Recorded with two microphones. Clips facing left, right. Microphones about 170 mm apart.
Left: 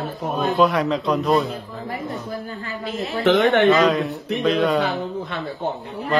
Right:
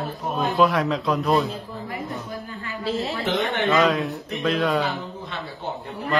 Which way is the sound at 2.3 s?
35° left (ahead or behind).